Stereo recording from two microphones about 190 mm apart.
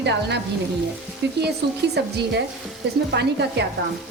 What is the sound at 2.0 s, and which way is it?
Speech, 60° right (ahead or behind).